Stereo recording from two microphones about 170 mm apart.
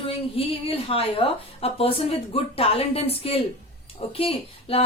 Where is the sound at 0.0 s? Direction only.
35° left (ahead or behind).